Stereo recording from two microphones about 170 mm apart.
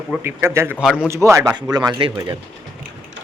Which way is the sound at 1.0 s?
15° right (ahead or behind).